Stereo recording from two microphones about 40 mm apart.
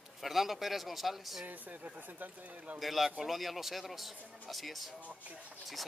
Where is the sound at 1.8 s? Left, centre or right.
Right.